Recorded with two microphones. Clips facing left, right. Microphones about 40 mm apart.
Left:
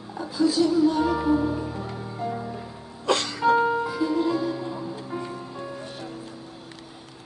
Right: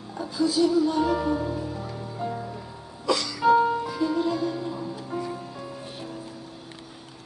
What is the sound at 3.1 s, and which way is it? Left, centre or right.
Music, left.